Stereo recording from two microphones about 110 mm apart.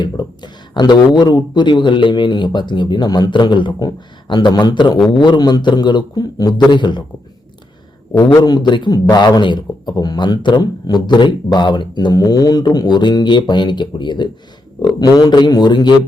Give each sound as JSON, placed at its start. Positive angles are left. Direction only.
{"t": 0.0, "sound": "a man's voice", "side_deg": 40}
{"t": 8.4, "sound": "a man's voice", "side_deg": 35}